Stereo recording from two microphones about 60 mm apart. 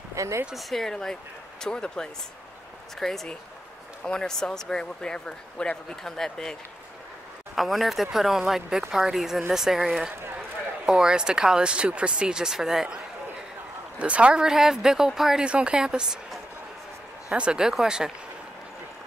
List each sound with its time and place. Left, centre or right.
0.1 s a sound: right
0.6 s speech: centre
7.5 s speech: centre
10.9 s speech: centre
13.9 s speech: right
15.4 s speech: centre
17.3 s speech: centre